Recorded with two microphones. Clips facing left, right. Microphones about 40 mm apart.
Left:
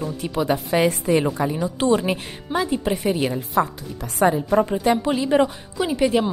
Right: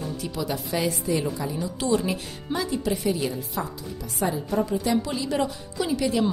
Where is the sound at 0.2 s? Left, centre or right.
Left.